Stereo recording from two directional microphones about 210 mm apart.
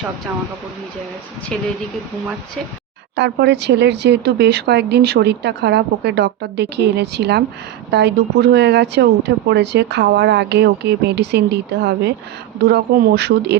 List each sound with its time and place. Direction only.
3.2 s speech: 55° right (ahead or behind)